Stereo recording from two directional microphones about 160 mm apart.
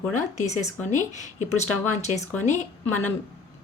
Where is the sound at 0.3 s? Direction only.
45° left (ahead or behind).